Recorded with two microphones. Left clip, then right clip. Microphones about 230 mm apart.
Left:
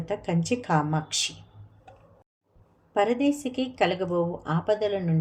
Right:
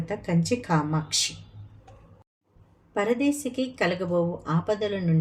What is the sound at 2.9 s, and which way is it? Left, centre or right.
Speech, centre.